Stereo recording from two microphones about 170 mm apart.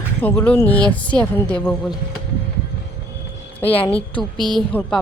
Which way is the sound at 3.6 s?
35° left (ahead or behind).